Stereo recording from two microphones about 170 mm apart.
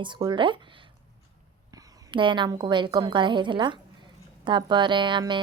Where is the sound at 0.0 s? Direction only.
25° right (ahead or behind).